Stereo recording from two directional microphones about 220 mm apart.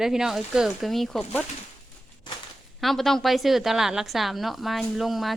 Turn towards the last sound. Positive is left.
turn(degrees=0)  # may be behind; listen again after turning